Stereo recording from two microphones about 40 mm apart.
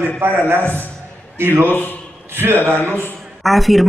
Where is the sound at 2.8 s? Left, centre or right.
Left.